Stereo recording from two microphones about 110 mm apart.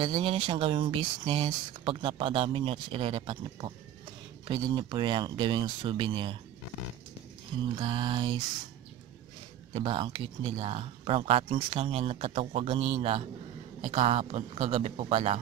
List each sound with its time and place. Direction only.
0.0 s speech: 50° right (ahead or behind)
4.5 s speech: 40° right (ahead or behind)
7.6 s speech: 50° right (ahead or behind)
9.8 s speech: 50° right (ahead or behind)
13.7 s speech: 85° right; by 15.3 s 65° right (ahead or behind)